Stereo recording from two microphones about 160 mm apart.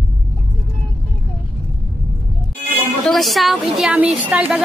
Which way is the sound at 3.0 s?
Centre (ahead or behind).